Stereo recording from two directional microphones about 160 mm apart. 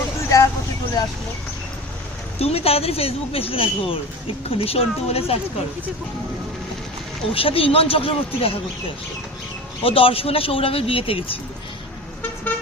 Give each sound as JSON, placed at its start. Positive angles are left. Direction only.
{"t": 0.3, "sound": "a sound", "side_deg": 20}
{"t": 2.4, "sound": "speech", "side_deg": 40}
{"t": 7.3, "sound": "speech", "side_deg": 35}
{"t": 9.8, "sound": "speech", "side_deg": 35}